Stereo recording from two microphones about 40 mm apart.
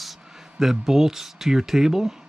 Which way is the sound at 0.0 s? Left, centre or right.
Centre.